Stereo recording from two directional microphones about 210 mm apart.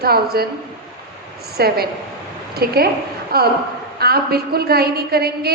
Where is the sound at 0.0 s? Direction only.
45° right (ahead or behind).